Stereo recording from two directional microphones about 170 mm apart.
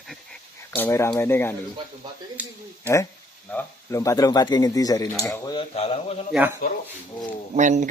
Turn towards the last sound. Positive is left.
turn(degrees=-45)  # may be behind; listen again after turning